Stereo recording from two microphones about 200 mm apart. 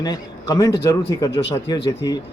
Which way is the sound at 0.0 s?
20° left (ahead or behind).